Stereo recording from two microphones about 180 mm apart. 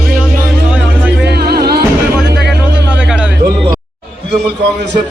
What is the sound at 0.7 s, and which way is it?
Music, 5° right (ahead or behind).